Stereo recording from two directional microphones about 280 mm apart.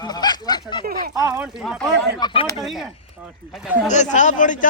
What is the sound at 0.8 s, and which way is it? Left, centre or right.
Speech, right.